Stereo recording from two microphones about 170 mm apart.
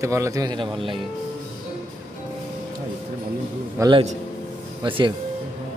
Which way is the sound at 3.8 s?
30° right (ahead or behind).